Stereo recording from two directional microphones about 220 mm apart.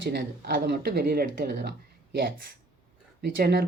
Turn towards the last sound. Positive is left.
turn(degrees=-45)  # may be behind; listen again after turning